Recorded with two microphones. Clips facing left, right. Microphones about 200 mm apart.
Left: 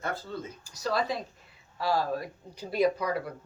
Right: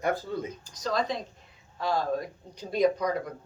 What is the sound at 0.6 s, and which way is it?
Speech, 10° left (ahead or behind).